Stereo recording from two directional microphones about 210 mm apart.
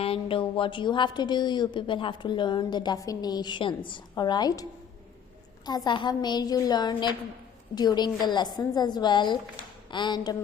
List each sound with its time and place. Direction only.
0.0 s a woman's voice: 25° left (ahead or behind)
5.6 s a woman's voice: 20° left (ahead or behind)